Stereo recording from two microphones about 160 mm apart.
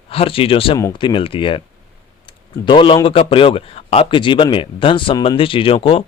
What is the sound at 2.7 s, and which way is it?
A man's voice, 30° left (ahead or behind).